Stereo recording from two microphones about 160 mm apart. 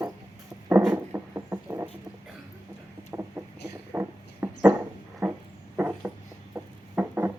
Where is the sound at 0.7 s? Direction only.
15° right (ahead or behind).